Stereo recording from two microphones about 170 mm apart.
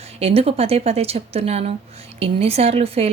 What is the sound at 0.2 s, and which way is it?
A woman's voice, 35° right (ahead or behind).